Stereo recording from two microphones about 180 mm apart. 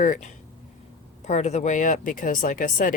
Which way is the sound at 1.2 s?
40° left (ahead or behind).